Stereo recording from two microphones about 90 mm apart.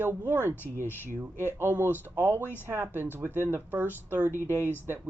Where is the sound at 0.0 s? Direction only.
20° right (ahead or behind).